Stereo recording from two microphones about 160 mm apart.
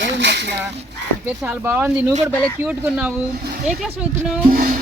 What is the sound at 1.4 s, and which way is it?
Speech, 10° right (ahead or behind).